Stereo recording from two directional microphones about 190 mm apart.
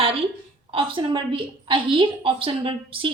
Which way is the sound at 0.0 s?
30° right (ahead or behind).